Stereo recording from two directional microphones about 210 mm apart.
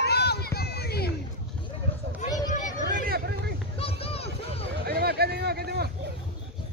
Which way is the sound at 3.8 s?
25° left (ahead or behind).